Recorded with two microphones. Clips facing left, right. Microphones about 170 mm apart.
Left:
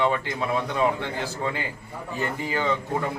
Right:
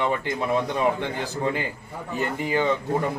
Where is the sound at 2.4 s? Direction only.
15° right (ahead or behind).